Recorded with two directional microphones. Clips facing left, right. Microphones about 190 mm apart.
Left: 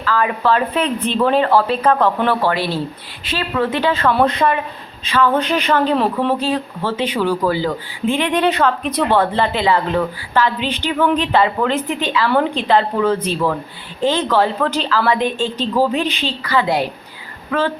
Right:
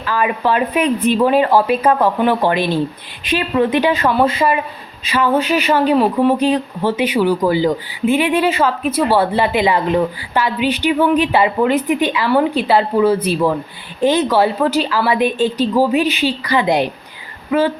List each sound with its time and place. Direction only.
0.0 s speech: 15° right (ahead or behind)